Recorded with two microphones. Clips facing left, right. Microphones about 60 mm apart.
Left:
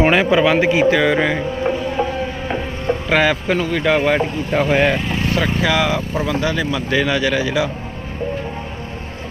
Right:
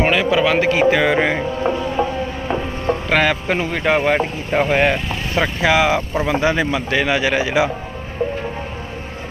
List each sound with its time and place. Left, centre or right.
0.1 s a sound: left
0.3 s a man's voice: centre
0.8 s speech: centre
3.1 s speech: centre
3.6 s speech: centre
5.3 s speech: right
6.7 s speech: centre